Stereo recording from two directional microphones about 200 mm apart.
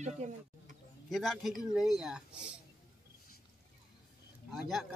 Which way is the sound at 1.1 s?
Centre (ahead or behind).